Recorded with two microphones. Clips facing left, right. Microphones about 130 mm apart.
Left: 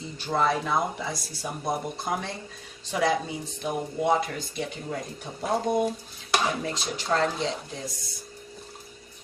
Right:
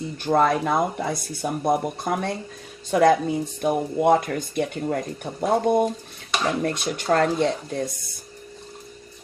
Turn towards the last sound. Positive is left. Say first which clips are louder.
# right 7 dB
turn(degrees=-55)  # may be behind; listen again after turning